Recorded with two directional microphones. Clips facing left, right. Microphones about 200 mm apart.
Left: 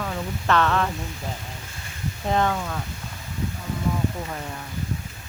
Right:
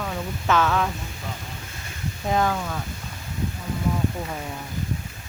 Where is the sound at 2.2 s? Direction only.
5° right (ahead or behind).